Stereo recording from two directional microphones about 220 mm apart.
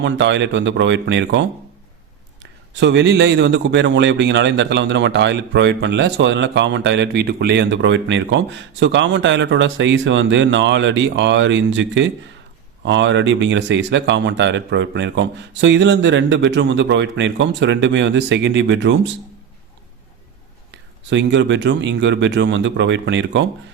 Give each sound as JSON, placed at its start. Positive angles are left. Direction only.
{"t": 0.0, "sound": "a man's voice", "side_deg": -55}
{"t": 20.7, "sound": "speech", "side_deg": -55}